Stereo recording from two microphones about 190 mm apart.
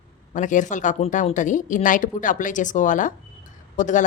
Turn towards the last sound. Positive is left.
turn(degrees=40)  # may be behind; listen again after turning